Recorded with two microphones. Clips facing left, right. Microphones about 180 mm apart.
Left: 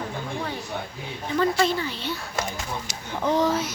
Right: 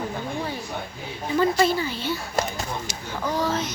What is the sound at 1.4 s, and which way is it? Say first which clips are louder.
Speech: right 2 dB; 5° right (ahead or behind).